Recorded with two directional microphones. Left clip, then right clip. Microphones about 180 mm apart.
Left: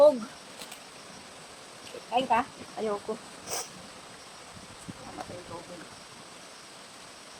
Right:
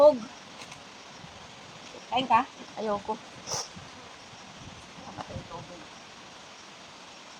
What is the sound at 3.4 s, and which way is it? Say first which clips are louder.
Dog: right 1 dB; 60° left (ahead or behind).